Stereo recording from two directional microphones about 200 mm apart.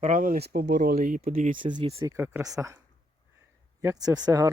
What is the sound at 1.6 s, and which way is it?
Speech, 25° right (ahead or behind).